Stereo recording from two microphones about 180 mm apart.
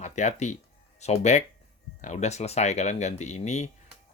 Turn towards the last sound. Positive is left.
turn(degrees=40)  # may be behind; listen again after turning